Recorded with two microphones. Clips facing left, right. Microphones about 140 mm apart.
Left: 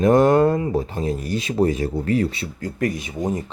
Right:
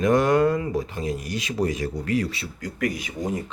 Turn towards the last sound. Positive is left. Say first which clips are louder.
# left 3 dB
turn(degrees=25)  # may be behind; listen again after turning